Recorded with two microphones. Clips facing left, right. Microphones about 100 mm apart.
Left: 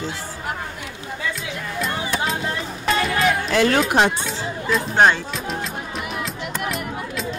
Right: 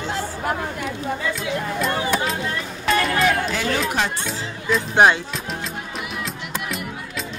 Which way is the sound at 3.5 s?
70° left (ahead or behind).